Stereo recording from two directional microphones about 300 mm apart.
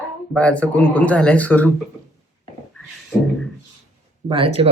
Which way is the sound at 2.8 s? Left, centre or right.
Centre.